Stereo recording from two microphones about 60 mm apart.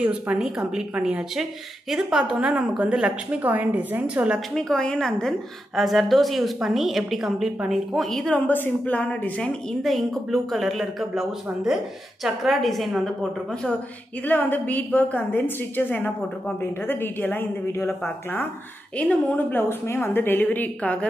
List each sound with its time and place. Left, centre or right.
0.4 s a woman's voice: centre
1.3 s a woman's voice: centre
3.4 s a woman's voice: right
4.6 s a woman's voice: centre
5.8 s a woman's voice: centre
8.3 s a woman's voice: left; by 9.8 s centre
9.8 s a woman's voice: centre
14.2 s a woman's voice: left
18.9 s a woman's voice: centre
19.3 s a woman's voice: left